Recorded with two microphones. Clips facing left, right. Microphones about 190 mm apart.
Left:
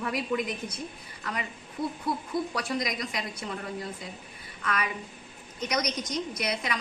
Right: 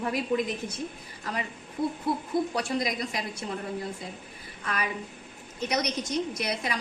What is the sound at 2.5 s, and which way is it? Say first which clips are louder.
Speech: right 2 dB; 30° right (ahead or behind).